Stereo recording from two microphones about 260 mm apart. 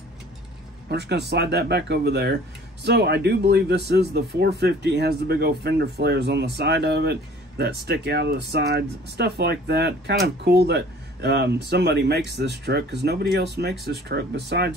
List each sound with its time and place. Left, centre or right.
0.8 s speech: right